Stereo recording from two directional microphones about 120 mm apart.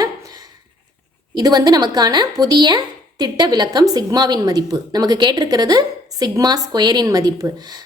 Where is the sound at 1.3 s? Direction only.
35° right (ahead or behind).